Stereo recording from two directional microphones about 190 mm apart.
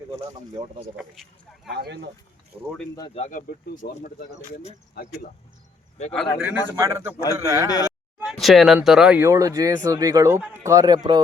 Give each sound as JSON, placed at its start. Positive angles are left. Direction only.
{"t": 1.7, "sound": "speech", "side_deg": -60}
{"t": 2.5, "sound": "speech", "side_deg": -5}
{"t": 3.2, "sound": "speech", "side_deg": 40}
{"t": 6.1, "sound": "speech", "side_deg": -10}
{"t": 8.2, "sound": "speech", "side_deg": 0}